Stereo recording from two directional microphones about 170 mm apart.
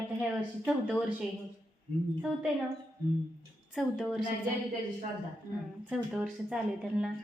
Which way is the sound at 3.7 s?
Centre (ahead or behind).